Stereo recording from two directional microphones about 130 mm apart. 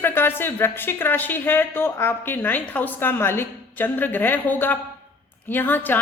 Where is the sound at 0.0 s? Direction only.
15° left (ahead or behind).